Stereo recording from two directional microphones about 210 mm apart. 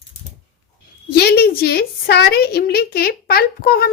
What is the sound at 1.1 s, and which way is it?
A child's voice, 50° left (ahead or behind).